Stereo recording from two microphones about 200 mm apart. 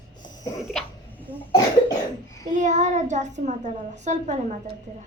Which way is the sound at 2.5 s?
35° right (ahead or behind).